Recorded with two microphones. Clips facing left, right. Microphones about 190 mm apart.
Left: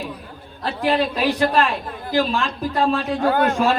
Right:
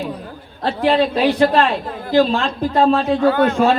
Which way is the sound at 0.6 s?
25° right (ahead or behind).